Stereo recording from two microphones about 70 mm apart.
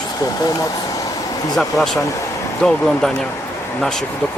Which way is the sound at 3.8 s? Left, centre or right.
Centre.